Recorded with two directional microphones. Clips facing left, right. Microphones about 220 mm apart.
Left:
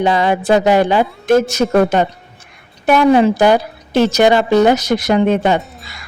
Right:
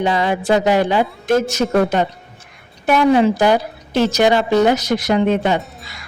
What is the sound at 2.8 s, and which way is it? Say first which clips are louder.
A woman's voice: left 2 dB; 55° left (ahead or behind).